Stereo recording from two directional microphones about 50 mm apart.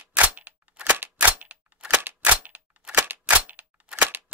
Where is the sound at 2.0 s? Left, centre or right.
Right.